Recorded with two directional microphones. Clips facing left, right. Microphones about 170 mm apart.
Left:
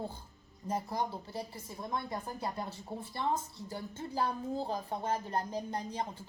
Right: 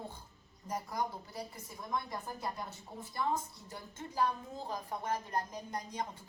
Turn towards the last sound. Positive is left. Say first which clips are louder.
# left 3 dB
turn(degrees=30)  # may be behind; listen again after turning